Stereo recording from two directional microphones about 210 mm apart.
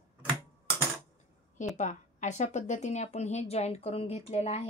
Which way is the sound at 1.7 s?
35° left (ahead or behind).